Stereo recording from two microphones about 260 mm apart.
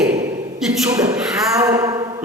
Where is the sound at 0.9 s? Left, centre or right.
Centre.